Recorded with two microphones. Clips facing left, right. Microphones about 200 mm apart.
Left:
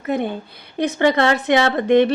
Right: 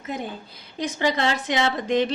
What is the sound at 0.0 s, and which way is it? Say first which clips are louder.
A woman's voice: left 9 dB; 60° left (ahead or behind).